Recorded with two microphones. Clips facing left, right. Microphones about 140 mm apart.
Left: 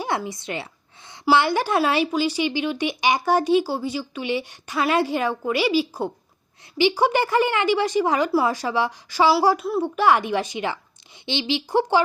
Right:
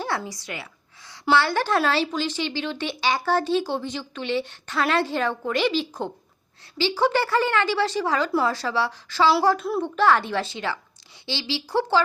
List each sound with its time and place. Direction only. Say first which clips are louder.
0.0 s a sound: left 2 dB; 10° left (ahead or behind)
0.3 s speech: left 5 dB; 25° left (ahead or behind)
1.2 s speech: left 2 dB; 15° left (ahead or behind)